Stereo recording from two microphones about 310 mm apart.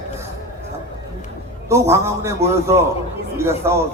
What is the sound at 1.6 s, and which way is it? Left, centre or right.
Speech, centre.